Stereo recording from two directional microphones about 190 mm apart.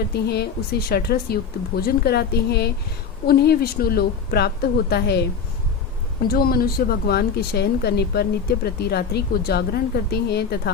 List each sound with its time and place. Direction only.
0.1 s speech: 60° left (ahead or behind)
6.2 s speech: 55° left (ahead or behind)